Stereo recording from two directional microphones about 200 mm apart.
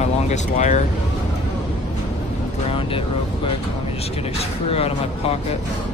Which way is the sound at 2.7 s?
25° left (ahead or behind).